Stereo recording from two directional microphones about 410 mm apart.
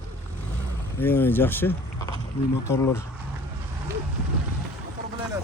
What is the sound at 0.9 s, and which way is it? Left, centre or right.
Speech, centre.